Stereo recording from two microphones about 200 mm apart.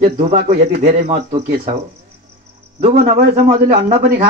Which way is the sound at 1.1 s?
30° right (ahead or behind).